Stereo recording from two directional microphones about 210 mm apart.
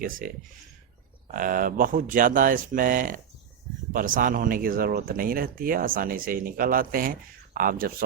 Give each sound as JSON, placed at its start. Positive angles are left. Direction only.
{"t": 1.3, "sound": "speech", "side_deg": -40}